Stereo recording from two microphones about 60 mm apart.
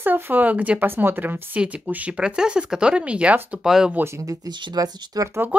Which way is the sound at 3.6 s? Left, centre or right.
Centre.